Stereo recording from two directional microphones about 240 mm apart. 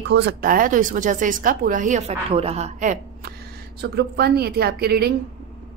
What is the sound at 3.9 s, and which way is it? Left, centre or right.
A woman's voice, right.